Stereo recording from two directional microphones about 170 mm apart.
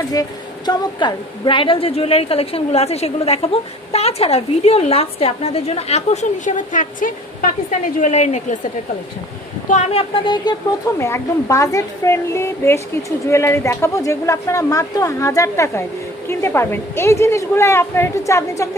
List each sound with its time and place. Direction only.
0.1 s a woman's voice: 20° left (ahead or behind); by 8.5 s 45° left (ahead or behind)
9.7 s a woman's voice: 40° left (ahead or behind)
11.0 s a woman's voice: 15° left (ahead or behind)